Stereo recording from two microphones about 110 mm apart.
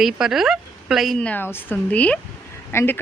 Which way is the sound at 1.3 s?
15° left (ahead or behind).